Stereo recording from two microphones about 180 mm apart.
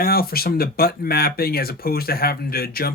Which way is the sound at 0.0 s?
55° left (ahead or behind).